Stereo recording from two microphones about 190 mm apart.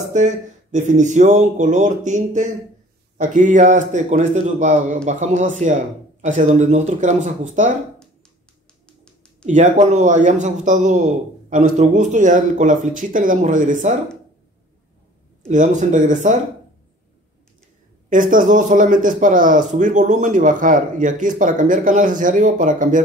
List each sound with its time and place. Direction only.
0.1 s speech: 40° right (ahead or behind)
9.5 s speech: 40° right (ahead or behind)
15.4 s speech: 40° right (ahead or behind)
18.1 s a man's voice: 45° right (ahead or behind)